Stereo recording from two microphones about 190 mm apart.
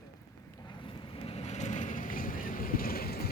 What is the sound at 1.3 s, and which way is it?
Vehicle, 35° left (ahead or behind).